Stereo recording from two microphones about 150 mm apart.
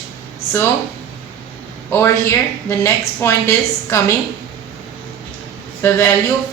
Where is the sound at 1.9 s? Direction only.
15° left (ahead or behind).